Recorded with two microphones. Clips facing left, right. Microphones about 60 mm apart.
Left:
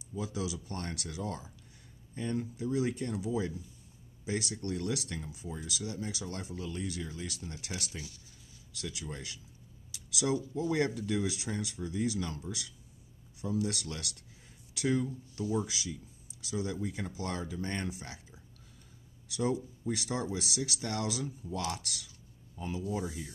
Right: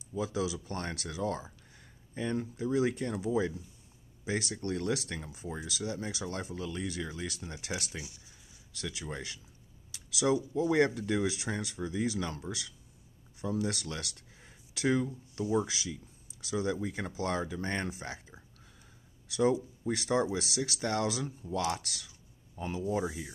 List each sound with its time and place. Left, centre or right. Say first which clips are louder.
0.2 s speech: right 4 dB; right
9.8 s a sound: right 3 dB; right
10.5 s speech: right 4 dB; right